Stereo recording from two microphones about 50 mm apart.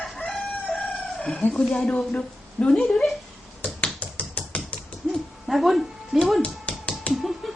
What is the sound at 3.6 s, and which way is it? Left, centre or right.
Finger snapping, left.